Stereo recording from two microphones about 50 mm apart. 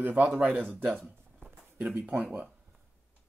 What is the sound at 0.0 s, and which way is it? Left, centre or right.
Speech, right.